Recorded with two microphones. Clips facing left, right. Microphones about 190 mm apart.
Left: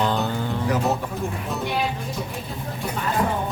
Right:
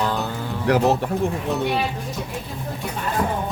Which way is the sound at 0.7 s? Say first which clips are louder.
Right 7 dB; 70° right (ahead or behind).